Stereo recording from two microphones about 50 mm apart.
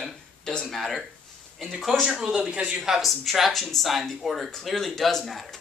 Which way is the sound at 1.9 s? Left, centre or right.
Centre.